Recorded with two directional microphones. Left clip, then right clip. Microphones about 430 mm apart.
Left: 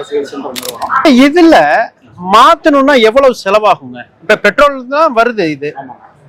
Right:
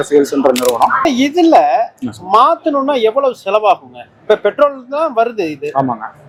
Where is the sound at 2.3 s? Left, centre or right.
Left.